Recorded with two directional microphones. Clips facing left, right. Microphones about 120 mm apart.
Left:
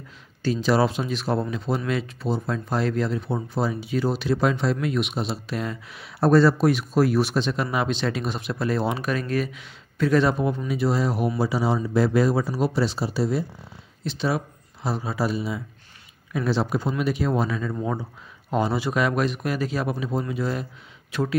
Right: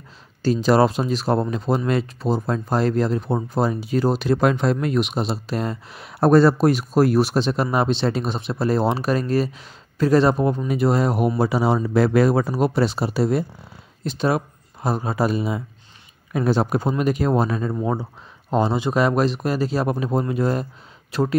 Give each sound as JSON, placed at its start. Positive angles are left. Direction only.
{"t": 0.4, "sound": "speech", "side_deg": -40}
{"t": 4.7, "sound": "speech", "side_deg": -40}
{"t": 10.7, "sound": "speech", "side_deg": -55}
{"t": 19.9, "sound": "speech", "side_deg": -50}